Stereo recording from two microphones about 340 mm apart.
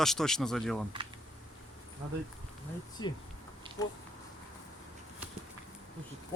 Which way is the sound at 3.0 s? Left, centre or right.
Centre.